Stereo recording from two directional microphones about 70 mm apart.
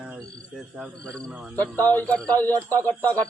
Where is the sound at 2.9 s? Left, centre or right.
Left.